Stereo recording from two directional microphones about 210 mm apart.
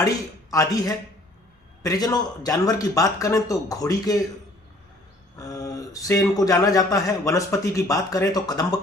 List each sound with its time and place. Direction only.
0.5 s speech: 15° left (ahead or behind)
5.4 s speech: 15° left (ahead or behind)